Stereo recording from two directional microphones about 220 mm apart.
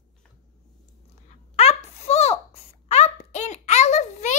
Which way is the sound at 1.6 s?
30° left (ahead or behind).